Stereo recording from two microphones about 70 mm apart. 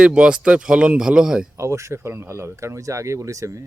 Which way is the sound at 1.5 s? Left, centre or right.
Right.